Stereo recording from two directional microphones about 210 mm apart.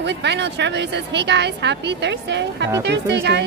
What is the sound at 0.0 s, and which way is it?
A woman's voice, 55° right (ahead or behind).